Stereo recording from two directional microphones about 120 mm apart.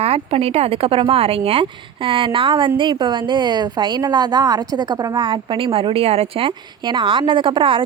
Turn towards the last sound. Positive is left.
turn(degrees=-45)  # may be behind; listen again after turning